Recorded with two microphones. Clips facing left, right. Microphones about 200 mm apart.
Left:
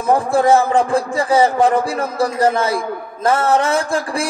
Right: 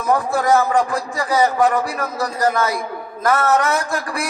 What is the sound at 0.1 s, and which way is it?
A man's voice, 30° left (ahead or behind).